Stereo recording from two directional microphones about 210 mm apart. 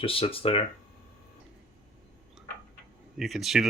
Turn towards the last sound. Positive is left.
turn(degrees=0)  # may be behind; listen again after turning